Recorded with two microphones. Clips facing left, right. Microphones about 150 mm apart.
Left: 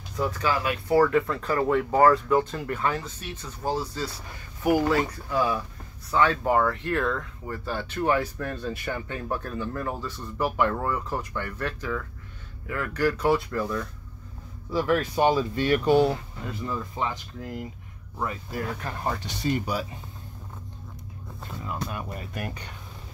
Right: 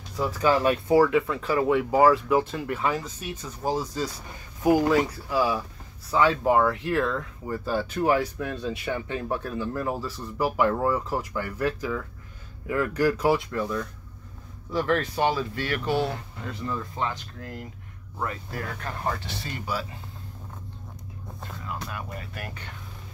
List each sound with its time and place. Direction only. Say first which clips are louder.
0.4 s speech: right 9 dB; 25° right (ahead or behind)
0.9 s speech: left 1 dB; 5° right (ahead or behind)
5.3 s speech: right 1 dB; 5° right (ahead or behind)
13.3 s speech: even; centre (ahead or behind)
14.7 s speech: left 1 dB; 10° left (ahead or behind)
21.6 s speech: left 3 dB; 25° left (ahead or behind)